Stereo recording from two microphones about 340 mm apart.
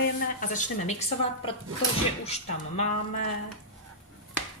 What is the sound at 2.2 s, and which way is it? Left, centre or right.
Speech, centre.